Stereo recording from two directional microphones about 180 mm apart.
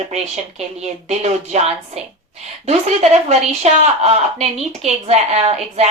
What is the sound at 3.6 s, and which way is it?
Speech, 35° right (ahead or behind).